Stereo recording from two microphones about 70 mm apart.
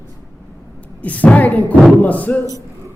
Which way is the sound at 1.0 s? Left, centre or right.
Left.